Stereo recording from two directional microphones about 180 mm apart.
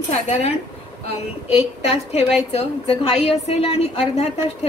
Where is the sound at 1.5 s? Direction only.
35° left (ahead or behind).